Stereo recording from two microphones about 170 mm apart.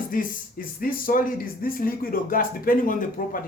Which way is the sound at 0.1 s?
55° left (ahead or behind).